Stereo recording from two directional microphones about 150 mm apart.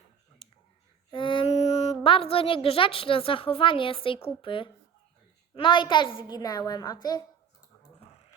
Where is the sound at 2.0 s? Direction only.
40° left (ahead or behind).